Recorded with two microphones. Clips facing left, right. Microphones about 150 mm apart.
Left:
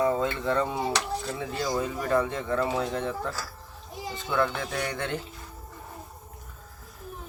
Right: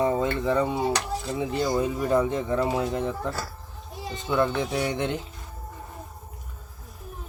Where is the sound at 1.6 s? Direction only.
5° right (ahead or behind).